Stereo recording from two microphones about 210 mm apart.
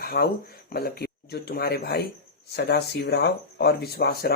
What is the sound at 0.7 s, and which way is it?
Speech, 45° left (ahead or behind).